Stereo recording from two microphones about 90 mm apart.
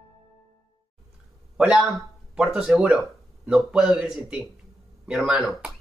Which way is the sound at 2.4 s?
10° right (ahead or behind).